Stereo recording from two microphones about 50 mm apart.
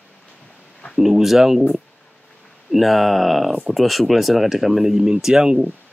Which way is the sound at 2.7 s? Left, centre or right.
Centre.